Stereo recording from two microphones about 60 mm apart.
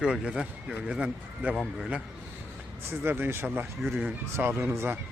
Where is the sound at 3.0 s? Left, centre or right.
Right.